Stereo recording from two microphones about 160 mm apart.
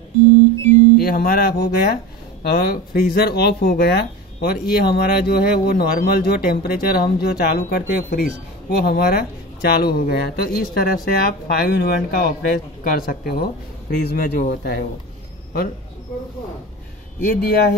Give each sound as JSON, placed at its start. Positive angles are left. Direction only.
{"t": 1.0, "sound": "speech", "side_deg": 70}
{"t": 17.2, "sound": "speech", "side_deg": 65}